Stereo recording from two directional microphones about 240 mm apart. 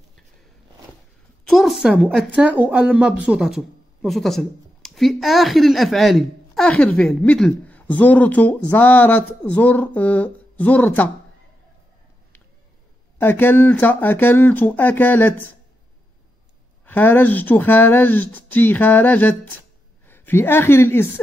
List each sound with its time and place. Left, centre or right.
1.5 s a woman's voice: centre
13.2 s speech: centre
16.8 s a woman's voice: centre